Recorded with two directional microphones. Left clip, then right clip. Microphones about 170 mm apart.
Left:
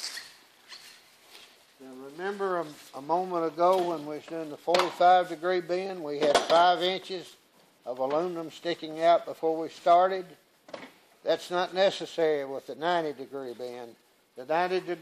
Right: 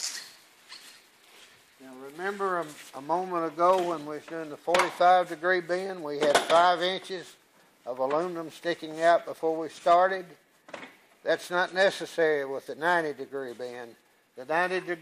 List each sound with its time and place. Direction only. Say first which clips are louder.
2.0 s speech: right 1 dB; 5° right (ahead or behind)
2.9 s speech: left 1 dB; 20° right (ahead or behind)
6.1 s speech: even; 10° left (ahead or behind)
6.5 s speech: even; 15° right (ahead or behind)
11.2 s speech: right 1 dB; 20° right (ahead or behind)